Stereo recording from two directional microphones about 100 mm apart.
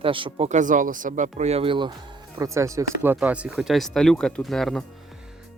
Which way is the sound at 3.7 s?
5° left (ahead or behind).